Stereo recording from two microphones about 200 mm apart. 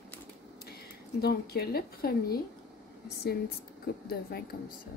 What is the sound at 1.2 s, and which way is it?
Speech, 50° left (ahead or behind).